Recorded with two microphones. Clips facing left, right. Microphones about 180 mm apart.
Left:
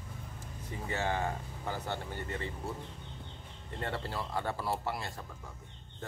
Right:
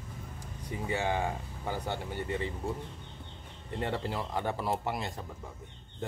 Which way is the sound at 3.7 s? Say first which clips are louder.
Right 4 dB; 15° right (ahead or behind).